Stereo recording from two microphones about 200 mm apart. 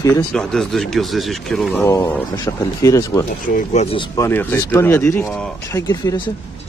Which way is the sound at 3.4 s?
40° left (ahead or behind).